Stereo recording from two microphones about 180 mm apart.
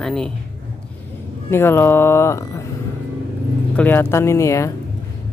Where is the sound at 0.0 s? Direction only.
5° left (ahead or behind).